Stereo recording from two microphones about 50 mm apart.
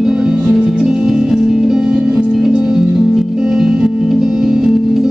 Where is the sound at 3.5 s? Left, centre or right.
Centre.